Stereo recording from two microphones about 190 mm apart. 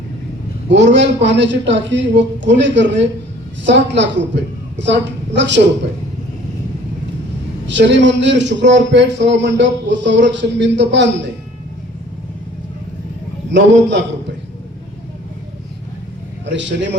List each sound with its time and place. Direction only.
0.7 s a man's voice: 70° right (ahead or behind)
7.7 s a man's voice: 70° right (ahead or behind)
13.5 s a man's voice: 70° right (ahead or behind)
16.5 s a man's voice: 70° right (ahead or behind)